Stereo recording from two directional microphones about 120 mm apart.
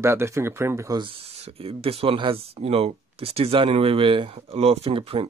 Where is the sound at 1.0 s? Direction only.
50° right (ahead or behind).